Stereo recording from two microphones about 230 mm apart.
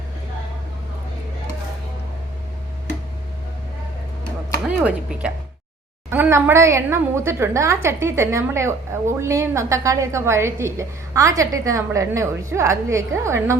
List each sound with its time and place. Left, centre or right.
4.8 s a woman's voice: centre